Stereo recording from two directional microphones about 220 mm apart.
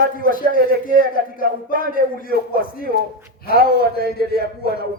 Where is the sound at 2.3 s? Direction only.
45° right (ahead or behind).